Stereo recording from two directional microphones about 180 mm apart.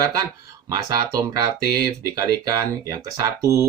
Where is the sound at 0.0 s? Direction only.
20° right (ahead or behind).